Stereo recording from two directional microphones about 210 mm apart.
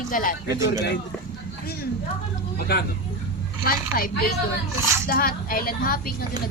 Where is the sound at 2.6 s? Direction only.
50° left (ahead or behind).